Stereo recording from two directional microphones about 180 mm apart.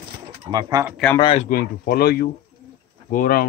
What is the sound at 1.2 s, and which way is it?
Speech, 30° left (ahead or behind).